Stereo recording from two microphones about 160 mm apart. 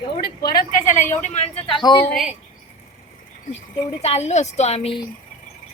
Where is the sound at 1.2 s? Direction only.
40° left (ahead or behind).